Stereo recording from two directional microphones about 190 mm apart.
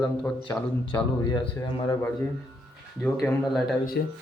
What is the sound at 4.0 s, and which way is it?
Speech, 55° left (ahead or behind).